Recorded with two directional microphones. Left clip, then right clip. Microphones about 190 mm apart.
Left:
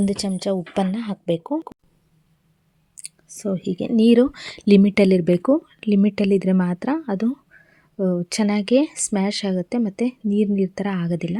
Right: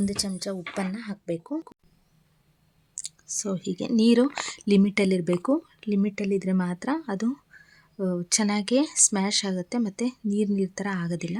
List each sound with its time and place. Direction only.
0.0 s speech: 40° left (ahead or behind)
3.0 s speech: 20° left (ahead or behind)